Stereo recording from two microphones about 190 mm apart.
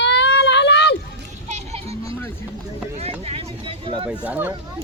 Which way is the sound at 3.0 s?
30° right (ahead or behind).